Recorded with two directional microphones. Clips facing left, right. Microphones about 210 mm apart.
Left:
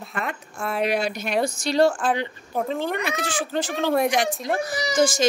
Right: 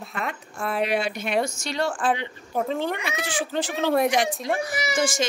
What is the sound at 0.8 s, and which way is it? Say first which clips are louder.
Speech: left 1 dB; 40° left (ahead or behind).